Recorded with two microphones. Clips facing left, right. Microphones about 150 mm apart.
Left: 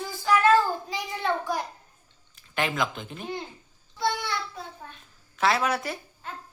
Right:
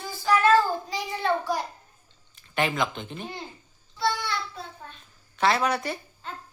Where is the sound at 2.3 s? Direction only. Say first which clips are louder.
Right 2 dB; centre (ahead or behind).